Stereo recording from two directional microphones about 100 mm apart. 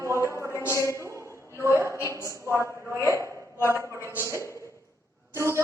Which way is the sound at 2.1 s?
30° left (ahead or behind).